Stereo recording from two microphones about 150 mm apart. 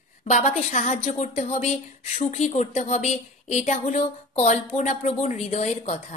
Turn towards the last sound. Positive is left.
turn(degrees=50)  # may be behind; listen again after turning